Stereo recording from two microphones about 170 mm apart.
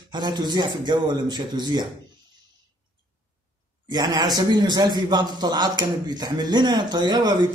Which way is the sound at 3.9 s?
25° right (ahead or behind).